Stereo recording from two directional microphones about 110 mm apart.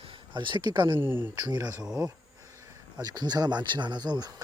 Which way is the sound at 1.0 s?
20° right (ahead or behind).